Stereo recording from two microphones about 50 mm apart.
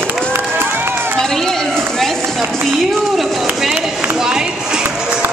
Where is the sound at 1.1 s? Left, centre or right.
Centre.